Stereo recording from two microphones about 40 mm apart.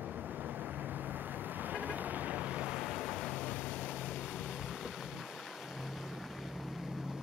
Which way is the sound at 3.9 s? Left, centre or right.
Right.